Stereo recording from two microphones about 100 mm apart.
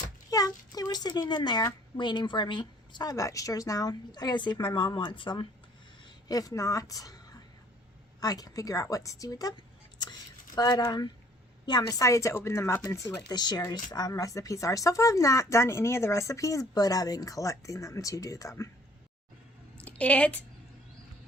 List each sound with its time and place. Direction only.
0.3 s a woman's voice: 40° left (ahead or behind); by 5.5 s 55° left (ahead or behind)
6.2 s a woman's voice: 40° left (ahead or behind)
19.7 s a sound: 15° left (ahead or behind)